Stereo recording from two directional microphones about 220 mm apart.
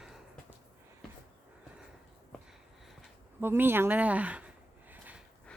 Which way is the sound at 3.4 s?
10° right (ahead or behind).